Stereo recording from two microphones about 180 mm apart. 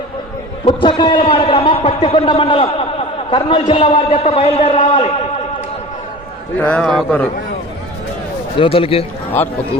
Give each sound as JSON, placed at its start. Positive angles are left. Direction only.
{"t": 0.6, "sound": "a man's voice", "side_deg": 25}
{"t": 6.6, "sound": "a man's voice", "side_deg": 5}
{"t": 8.5, "sound": "a man's voice", "side_deg": 30}